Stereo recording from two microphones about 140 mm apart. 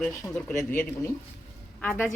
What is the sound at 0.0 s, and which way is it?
Speech, 5° left (ahead or behind).